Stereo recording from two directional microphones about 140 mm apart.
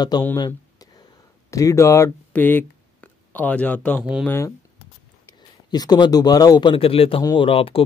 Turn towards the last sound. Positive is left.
turn(degrees=40)  # may be behind; listen again after turning